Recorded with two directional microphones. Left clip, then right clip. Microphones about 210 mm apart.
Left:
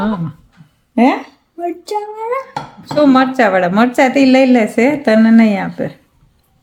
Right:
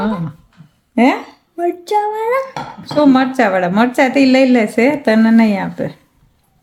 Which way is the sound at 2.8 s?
10° left (ahead or behind).